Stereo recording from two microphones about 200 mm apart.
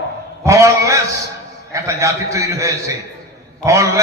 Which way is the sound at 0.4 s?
15° right (ahead or behind).